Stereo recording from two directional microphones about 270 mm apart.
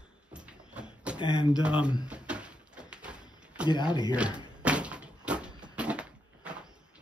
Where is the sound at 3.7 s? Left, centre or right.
Centre.